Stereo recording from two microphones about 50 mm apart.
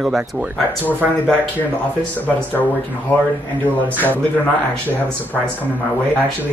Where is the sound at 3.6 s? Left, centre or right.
Left.